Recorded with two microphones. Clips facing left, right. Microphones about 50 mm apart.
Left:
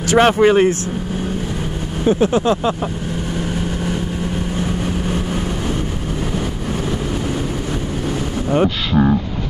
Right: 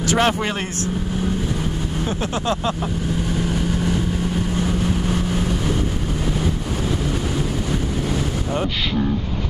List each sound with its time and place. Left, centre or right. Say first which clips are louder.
0.2 s speech: left 13 dB; centre
2.0 s vehicle: left 10 dB; centre